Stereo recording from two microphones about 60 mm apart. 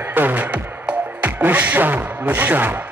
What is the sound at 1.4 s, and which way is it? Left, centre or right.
Music, right.